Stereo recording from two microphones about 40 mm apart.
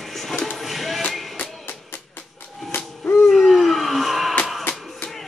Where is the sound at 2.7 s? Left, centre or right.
Left.